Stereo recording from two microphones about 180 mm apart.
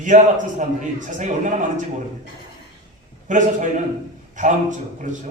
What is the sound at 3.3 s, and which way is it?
A man's voice, 45° right (ahead or behind).